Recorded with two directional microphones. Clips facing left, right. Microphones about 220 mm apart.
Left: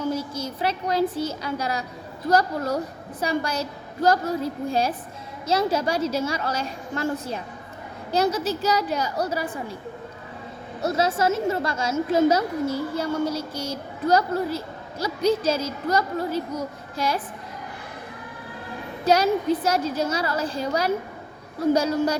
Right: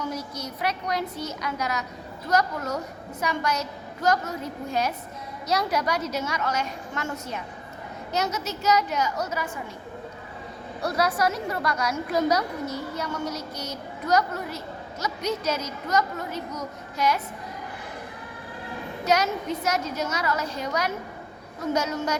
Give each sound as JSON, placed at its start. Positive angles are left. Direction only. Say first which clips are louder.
{"t": 0.0, "sound": "a child's voice", "louder": "left 5 dB", "side_deg": 30}
{"t": 10.8, "sound": "a woman's voice", "louder": "left 3 dB", "side_deg": 25}
{"t": 19.0, "sound": "a woman's voice", "louder": "left 5 dB", "side_deg": 30}